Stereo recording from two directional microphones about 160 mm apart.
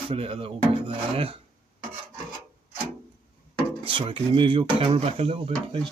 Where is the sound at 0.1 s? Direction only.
35° right (ahead or behind).